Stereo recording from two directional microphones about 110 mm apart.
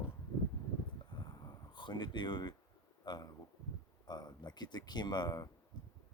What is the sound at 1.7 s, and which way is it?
Speech, 45° left (ahead or behind).